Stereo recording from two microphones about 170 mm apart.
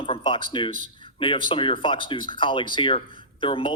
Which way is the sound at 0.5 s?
30° left (ahead or behind).